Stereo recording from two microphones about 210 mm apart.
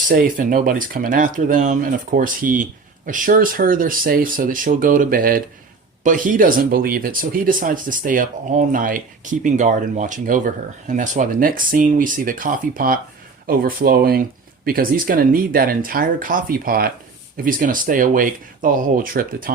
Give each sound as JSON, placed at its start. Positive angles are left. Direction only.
{"t": 0.1, "sound": "speech", "side_deg": -45}